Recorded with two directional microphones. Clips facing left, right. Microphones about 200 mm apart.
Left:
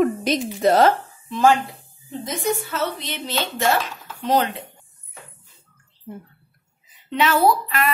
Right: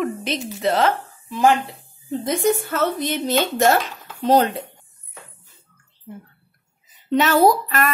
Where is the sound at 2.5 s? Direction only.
50° right (ahead or behind).